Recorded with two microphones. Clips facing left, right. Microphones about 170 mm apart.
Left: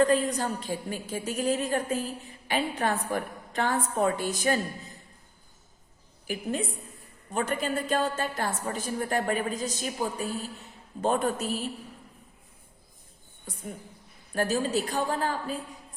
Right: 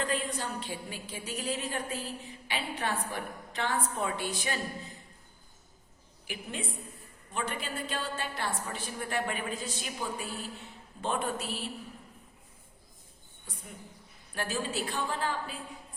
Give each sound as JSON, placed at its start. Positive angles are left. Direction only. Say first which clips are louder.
{"t": 0.0, "sound": "a woman's voice", "louder": "left 9 dB", "side_deg": 45}
{"t": 6.2, "sound": "a woman's voice", "louder": "left 8 dB", "side_deg": 45}
{"t": 14.3, "sound": "a woman's voice", "louder": "left 7 dB", "side_deg": 40}